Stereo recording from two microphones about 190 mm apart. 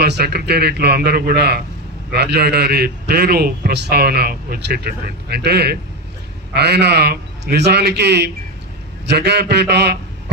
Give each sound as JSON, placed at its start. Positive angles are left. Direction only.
{"t": 0.0, "sound": "a man's voice", "side_deg": -55}